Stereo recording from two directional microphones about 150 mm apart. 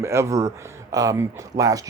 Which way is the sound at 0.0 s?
20° right (ahead or behind).